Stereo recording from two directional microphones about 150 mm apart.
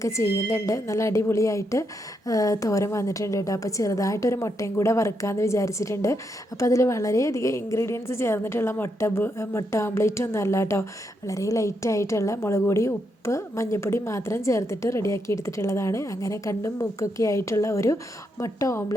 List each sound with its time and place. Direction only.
0.0 s a woman's voice: 20° left (ahead or behind)